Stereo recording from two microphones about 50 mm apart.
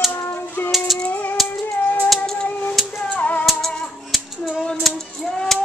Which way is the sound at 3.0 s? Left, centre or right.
Left.